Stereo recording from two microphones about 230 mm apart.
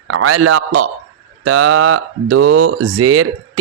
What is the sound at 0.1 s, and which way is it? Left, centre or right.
Speech, right.